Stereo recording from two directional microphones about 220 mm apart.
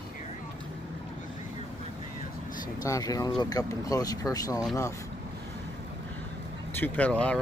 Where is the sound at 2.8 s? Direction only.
15° left (ahead or behind).